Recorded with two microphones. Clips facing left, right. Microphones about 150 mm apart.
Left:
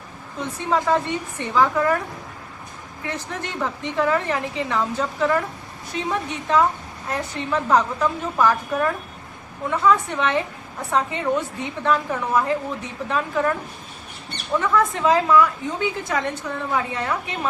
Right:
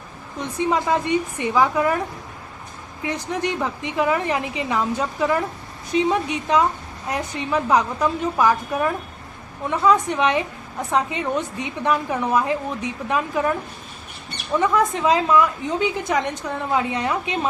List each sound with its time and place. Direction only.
0.3 s a woman's voice: 15° right (ahead or behind)
3.0 s a woman's voice: 15° right (ahead or behind)
11.6 s a woman's voice: 15° right (ahead or behind)
14.6 s a woman's voice: 20° right (ahead or behind)